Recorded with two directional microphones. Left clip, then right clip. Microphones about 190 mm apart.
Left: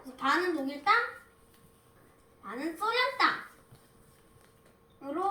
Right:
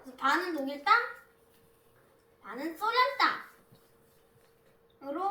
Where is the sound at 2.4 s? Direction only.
Centre (ahead or behind).